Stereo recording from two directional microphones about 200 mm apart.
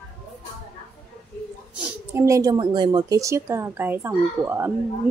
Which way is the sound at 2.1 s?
15° right (ahead or behind).